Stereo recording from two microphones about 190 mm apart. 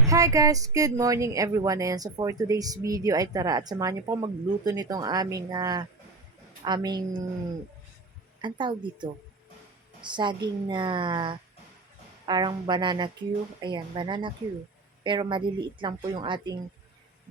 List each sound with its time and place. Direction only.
0.1 s speech: 20° right (ahead or behind)
8.4 s speech: 25° right (ahead or behind)